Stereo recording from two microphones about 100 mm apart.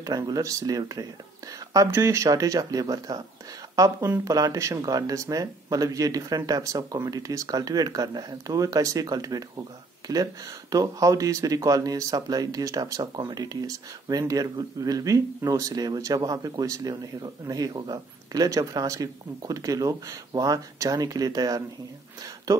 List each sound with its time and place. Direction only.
0.0 s speech: 40° right (ahead or behind)